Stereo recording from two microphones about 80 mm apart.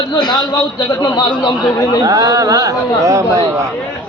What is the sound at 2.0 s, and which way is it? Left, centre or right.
Speech, right.